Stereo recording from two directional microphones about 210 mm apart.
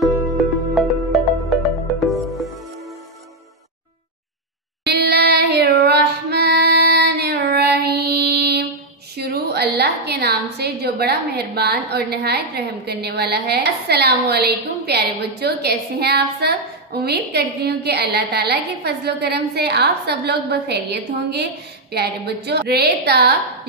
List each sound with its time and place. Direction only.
0.2 s music: centre (ahead or behind)
4.8 s female singing: 50° right (ahead or behind)
9.1 s a woman's voice: 50° right (ahead or behind)